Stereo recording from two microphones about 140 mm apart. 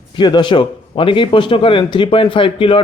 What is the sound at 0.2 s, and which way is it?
A man's voice, 35° left (ahead or behind).